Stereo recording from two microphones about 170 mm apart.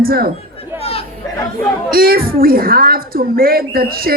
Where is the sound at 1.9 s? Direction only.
60° right (ahead or behind).